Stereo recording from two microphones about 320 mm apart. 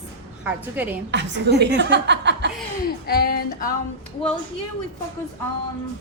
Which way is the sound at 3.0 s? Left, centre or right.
Left.